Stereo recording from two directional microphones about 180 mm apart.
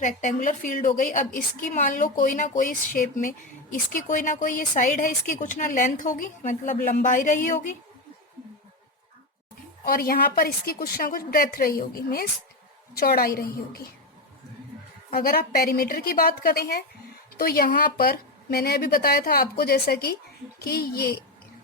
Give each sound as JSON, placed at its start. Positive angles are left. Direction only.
{"t": 0.0, "sound": "a woman's voice", "side_deg": 45}
{"t": 9.8, "sound": "a woman's voice", "side_deg": 55}
{"t": 15.1, "sound": "a woman's voice", "side_deg": 55}